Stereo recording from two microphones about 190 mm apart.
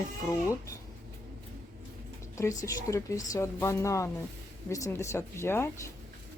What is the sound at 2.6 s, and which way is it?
Speech, 15° left (ahead or behind).